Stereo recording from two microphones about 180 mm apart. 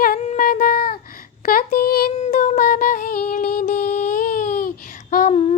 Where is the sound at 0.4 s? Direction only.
55° left (ahead or behind).